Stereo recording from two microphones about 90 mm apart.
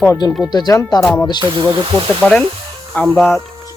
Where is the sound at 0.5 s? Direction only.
45° left (ahead or behind).